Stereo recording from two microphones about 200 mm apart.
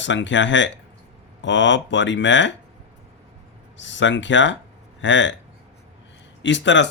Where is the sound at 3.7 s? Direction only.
65° left (ahead or behind).